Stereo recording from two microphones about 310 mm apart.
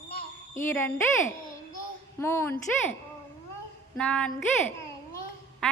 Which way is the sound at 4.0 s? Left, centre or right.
Centre.